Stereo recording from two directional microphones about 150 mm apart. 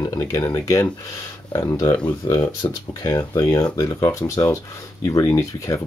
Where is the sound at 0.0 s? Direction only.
25° left (ahead or behind).